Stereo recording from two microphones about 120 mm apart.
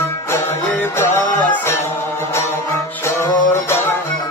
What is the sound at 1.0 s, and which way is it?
Music, 20° left (ahead or behind).